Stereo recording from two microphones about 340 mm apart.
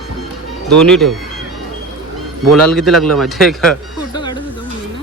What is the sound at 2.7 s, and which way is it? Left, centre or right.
Speech, centre.